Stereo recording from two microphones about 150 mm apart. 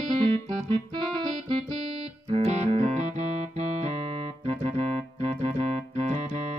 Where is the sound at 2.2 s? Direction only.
45° right (ahead or behind).